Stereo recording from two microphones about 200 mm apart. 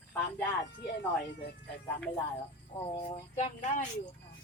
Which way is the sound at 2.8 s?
20° left (ahead or behind).